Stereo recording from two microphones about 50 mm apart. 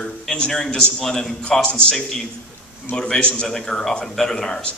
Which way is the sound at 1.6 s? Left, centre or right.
Left.